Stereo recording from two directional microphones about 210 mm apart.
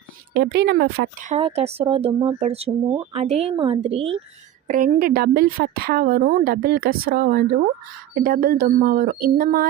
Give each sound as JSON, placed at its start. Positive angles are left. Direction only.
{"t": 0.3, "sound": "a woman's voice", "side_deg": -55}
{"t": 1.2, "sound": "speech", "side_deg": -30}
{"t": 4.7, "sound": "a woman's voice", "side_deg": -40}